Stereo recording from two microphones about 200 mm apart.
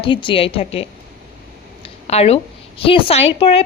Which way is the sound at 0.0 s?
25° left (ahead or behind).